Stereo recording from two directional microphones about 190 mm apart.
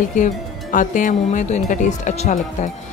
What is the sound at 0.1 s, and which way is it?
A woman's voice, 40° left (ahead or behind).